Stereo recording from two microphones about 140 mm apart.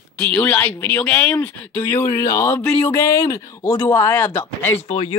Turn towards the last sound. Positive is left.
turn(degrees=45)  # may be behind; listen again after turning